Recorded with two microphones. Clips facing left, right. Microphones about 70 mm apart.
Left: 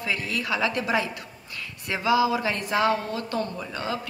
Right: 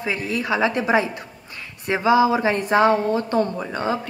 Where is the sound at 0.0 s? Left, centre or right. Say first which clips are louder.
Right 4 dB; right.